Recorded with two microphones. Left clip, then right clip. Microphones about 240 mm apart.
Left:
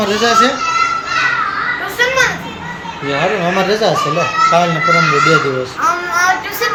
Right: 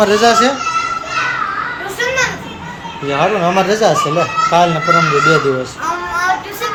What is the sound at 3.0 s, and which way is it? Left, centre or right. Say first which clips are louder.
Speech: right 2 dB; centre.